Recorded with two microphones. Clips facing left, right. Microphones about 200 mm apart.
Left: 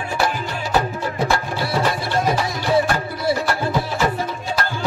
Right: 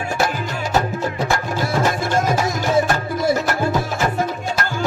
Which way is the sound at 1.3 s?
45° right (ahead or behind).